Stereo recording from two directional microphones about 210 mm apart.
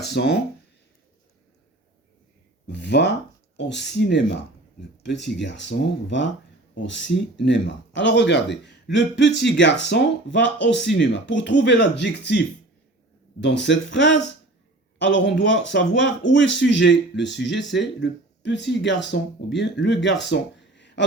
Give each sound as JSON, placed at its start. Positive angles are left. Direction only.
{"t": 0.0, "sound": "speech", "side_deg": 55}
{"t": 2.6, "sound": "speech", "side_deg": 55}
{"t": 5.2, "sound": "speech", "side_deg": 60}
{"t": 13.4, "sound": "speech", "side_deg": 55}